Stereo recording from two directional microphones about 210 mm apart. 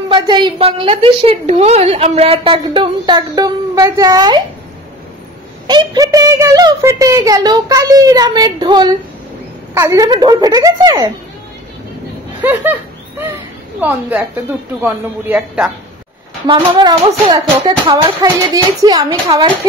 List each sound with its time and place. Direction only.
0.1 s a woman's voice: 20° right (ahead or behind)
5.7 s a woman's voice: 20° right (ahead or behind)
12.4 s a woman's voice: 10° right (ahead or behind)
13.7 s a woman's voice: 10° right (ahead or behind)
16.4 s a woman's voice: 25° right (ahead or behind)